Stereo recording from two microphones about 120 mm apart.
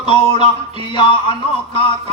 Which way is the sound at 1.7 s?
45° left (ahead or behind).